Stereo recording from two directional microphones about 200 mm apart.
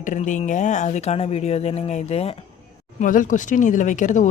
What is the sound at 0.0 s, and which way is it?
Speech, 40° left (ahead or behind).